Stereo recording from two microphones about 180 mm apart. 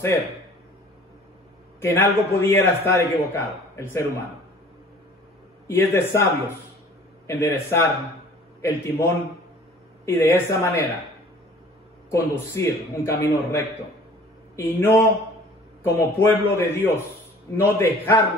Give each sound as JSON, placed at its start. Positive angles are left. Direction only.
{"t": 1.8, "sound": "a man's voice", "side_deg": 15}
{"t": 5.7, "sound": "a man's voice", "side_deg": 15}
{"t": 7.2, "sound": "a man's voice", "side_deg": 15}
{"t": 12.1, "sound": "a man's voice", "side_deg": 15}